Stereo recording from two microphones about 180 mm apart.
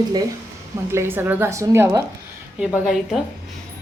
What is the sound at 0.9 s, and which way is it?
A woman's voice, 15° right (ahead or behind).